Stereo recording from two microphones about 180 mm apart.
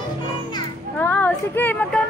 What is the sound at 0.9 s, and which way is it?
Speech, 10° left (ahead or behind).